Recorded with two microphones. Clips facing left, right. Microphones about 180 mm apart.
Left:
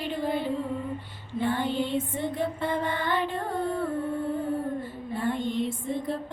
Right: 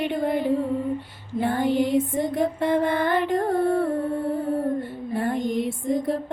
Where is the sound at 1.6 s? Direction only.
70° right (ahead or behind).